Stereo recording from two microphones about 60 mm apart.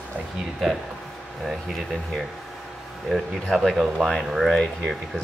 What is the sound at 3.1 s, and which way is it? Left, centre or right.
Speech, centre.